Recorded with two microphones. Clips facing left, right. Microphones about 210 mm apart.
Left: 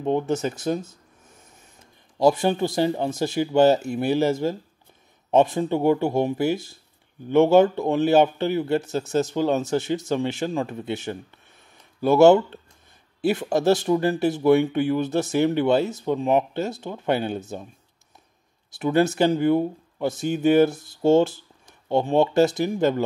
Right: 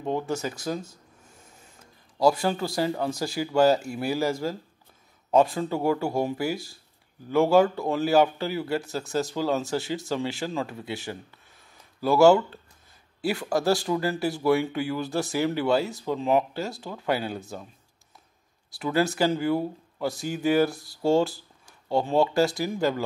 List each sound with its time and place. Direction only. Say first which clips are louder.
0.0 s speech: left 5 dB; 20° left (ahead or behind)
2.1 s speech: left 3 dB; 20° left (ahead or behind)
18.7 s speech: left 5 dB; 20° left (ahead or behind)